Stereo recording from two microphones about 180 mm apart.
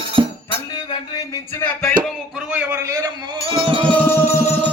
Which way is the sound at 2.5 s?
10° right (ahead or behind).